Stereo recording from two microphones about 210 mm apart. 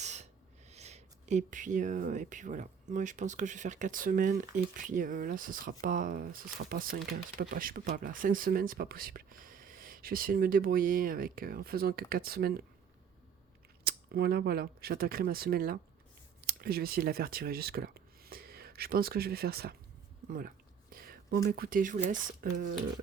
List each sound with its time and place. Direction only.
0.0 s gasp: 35° right (ahead or behind)
0.7 s speech: 30° right (ahead or behind); by 12.6 s 45° right (ahead or behind)
13.8 s speech: 45° right (ahead or behind)
20.9 s speech: 45° right (ahead or behind)